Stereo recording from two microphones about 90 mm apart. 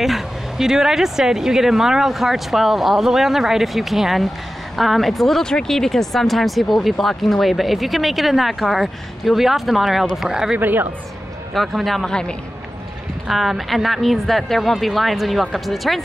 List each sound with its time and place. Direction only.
0.0 s speech: 5° right (ahead or behind)
10.6 s speech: 20° right (ahead or behind)
11.5 s speech: centre (ahead or behind)